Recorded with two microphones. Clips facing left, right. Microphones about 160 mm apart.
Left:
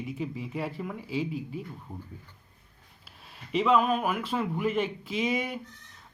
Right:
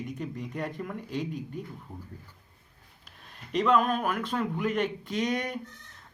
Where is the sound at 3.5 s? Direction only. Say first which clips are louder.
Left 1 dB; 5° left (ahead or behind).